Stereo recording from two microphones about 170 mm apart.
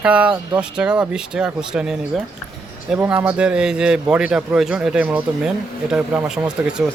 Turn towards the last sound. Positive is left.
turn(degrees=-5)  # may be behind; listen again after turning